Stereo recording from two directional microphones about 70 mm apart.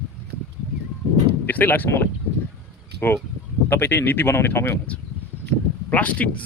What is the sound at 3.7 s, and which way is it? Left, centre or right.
Speech, left.